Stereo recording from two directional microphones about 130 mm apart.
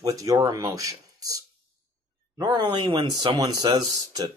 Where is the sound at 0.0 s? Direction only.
25° right (ahead or behind).